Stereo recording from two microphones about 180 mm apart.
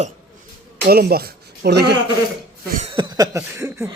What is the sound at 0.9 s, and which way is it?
Speech, 60° right (ahead or behind).